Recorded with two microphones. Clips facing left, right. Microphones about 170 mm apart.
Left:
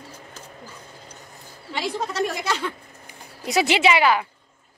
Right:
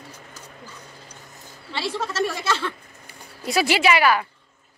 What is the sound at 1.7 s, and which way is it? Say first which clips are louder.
A woman's voice: left 1 dB; 15° left (ahead or behind).